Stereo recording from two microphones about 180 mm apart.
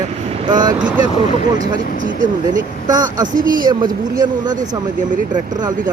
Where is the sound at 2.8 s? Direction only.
20° right (ahead or behind).